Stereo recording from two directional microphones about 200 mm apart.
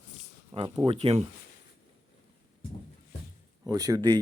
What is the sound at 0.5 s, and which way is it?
Speech, 25° right (ahead or behind).